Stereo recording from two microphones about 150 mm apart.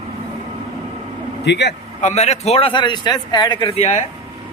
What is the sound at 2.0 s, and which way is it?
A man's voice, 50° left (ahead or behind).